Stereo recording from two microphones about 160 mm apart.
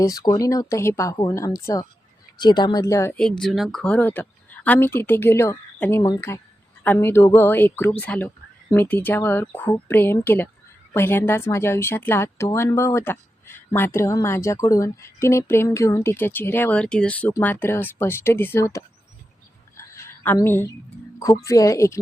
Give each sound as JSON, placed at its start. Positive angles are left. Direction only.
{"t": 0.0, "sound": "speech", "side_deg": 20}
{"t": 3.2, "sound": "a woman's voice", "side_deg": 5}
{"t": 19.7, "sound": "a sound", "side_deg": 15}
{"t": 21.2, "sound": "speech", "side_deg": 20}